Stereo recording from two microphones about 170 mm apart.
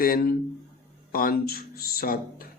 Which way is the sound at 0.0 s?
60° left (ahead or behind).